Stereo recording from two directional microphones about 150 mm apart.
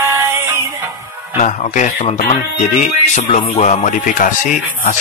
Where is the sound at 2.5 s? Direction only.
55° left (ahead or behind).